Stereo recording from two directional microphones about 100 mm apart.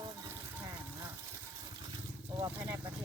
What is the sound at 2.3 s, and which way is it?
Speech, 35° right (ahead or behind).